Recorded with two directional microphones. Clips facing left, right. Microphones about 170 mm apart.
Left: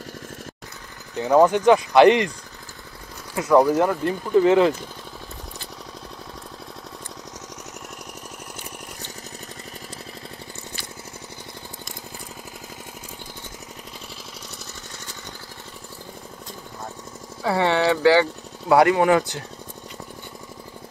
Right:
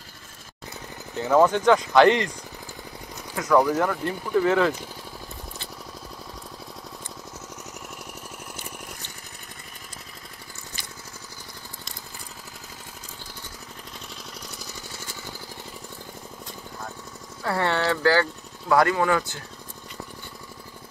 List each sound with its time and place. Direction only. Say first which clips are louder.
1.1 s speech: left 3 dB; 15° left (ahead or behind)
3.3 s speech: left 4 dB; 25° left (ahead or behind)
17.4 s speech: left 4 dB; 15° left (ahead or behind)